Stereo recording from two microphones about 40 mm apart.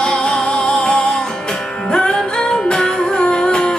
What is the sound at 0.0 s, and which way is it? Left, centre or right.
Music, left.